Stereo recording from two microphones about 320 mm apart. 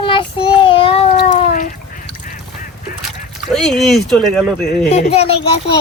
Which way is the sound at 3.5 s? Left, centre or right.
Centre.